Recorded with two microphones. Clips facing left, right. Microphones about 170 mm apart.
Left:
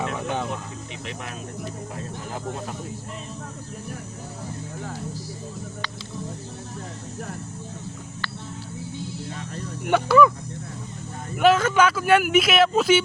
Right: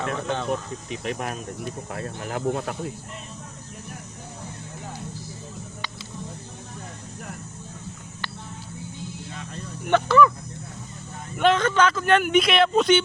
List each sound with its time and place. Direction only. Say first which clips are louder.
0.0 s a sound: even; 15° left (ahead or behind)
1.0 s speech: right 7 dB; 45° right (ahead or behind)
2.0 s speech: right 3 dB; 70° right (ahead or behind)
9.9 s speech: left 1 dB; 10° left (ahead or behind)
11.3 s speech: left 2 dB; 5° left (ahead or behind)